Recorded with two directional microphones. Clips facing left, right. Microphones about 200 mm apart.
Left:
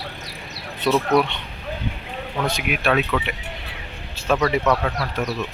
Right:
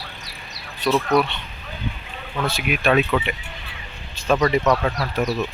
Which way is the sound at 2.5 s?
15° left (ahead or behind).